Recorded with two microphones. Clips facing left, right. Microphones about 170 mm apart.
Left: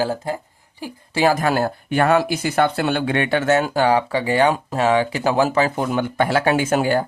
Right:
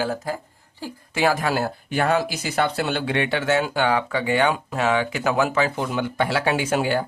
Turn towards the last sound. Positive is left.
turn(degrees=45)  # may be behind; listen again after turning